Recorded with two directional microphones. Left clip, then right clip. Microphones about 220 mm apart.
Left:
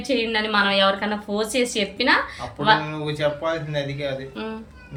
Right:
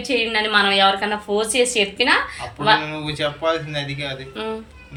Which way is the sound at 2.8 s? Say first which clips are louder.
Right 1 dB; 20° left (ahead or behind).